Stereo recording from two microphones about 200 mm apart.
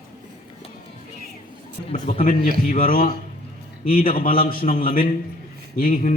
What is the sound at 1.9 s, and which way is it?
A man's voice, 35° left (ahead or behind).